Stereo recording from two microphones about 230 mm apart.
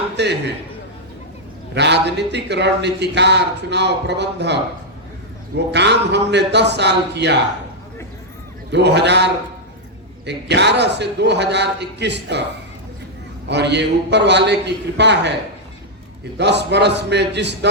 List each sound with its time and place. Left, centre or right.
0.2 s a man's voice: right
1.7 s a man's voice: right
5.7 s a man's voice: right
8.7 s a man's voice: right
13.5 s a man's voice: right
16.4 s a man's voice: right